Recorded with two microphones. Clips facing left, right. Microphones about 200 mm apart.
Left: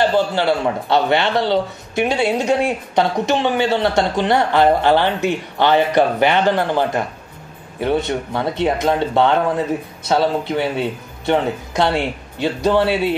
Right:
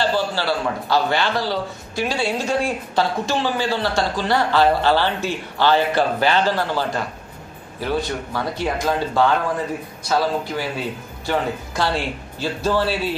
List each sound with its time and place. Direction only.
0.0 s a man's voice: 20° left (ahead or behind)